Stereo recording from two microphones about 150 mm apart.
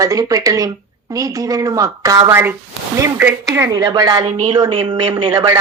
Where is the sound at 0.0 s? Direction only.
20° right (ahead or behind).